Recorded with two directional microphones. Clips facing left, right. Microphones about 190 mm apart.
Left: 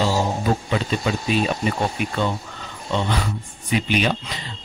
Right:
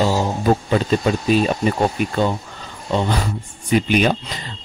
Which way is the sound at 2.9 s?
40° right (ahead or behind).